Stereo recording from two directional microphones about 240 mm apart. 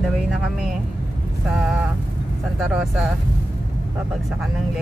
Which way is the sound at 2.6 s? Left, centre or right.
Centre.